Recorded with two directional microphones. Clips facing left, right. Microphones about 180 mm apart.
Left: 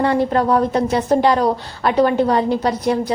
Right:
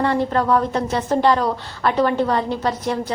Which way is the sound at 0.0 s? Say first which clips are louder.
Left 3 dB; 35° left (ahead or behind).